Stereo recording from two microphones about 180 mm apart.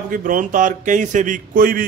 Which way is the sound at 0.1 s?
50° right (ahead or behind).